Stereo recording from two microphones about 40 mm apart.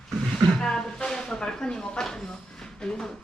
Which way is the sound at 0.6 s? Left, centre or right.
Centre.